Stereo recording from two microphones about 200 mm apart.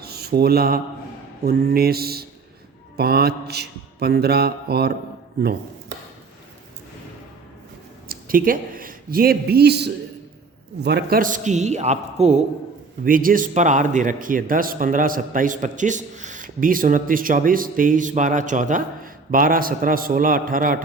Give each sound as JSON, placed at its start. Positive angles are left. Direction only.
{"t": 0.0, "sound": "a sound", "side_deg": -50}
{"t": 1.5, "sound": "a man's voice", "side_deg": -50}
{"t": 8.0, "sound": "a man's voice", "side_deg": -45}
{"t": 13.1, "sound": "a man's voice", "side_deg": -45}